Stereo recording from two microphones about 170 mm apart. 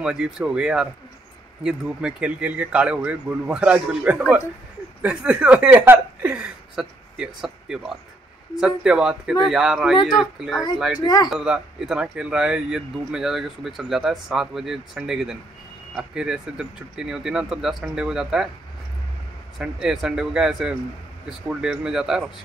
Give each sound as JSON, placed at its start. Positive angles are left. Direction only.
{"t": 0.0, "sound": "speech", "side_deg": -5}
{"t": 11.0, "sound": "speech", "side_deg": 25}
{"t": 11.2, "sound": "speech", "side_deg": -5}
{"t": 19.6, "sound": "speech", "side_deg": 0}